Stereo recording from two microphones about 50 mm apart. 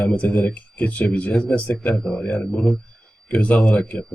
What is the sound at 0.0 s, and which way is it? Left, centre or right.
Speech, left.